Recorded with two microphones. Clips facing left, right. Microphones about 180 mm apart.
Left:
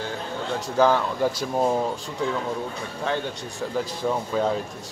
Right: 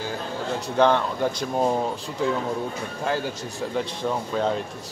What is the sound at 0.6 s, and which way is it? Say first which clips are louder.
Speech: even; 5° left (ahead or behind).